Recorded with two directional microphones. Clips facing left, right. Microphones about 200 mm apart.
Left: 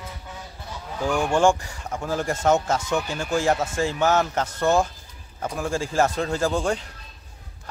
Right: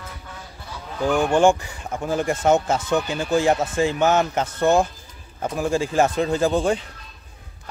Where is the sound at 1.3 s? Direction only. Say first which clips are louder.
Right 2 dB; 20° right (ahead or behind).